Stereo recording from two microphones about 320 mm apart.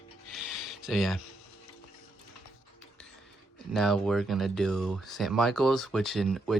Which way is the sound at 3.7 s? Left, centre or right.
Centre.